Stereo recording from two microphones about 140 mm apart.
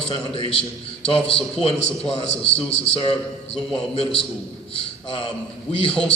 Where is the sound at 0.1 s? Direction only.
40° left (ahead or behind).